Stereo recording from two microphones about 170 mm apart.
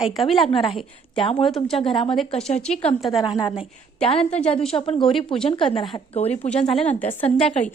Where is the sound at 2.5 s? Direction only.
35° left (ahead or behind).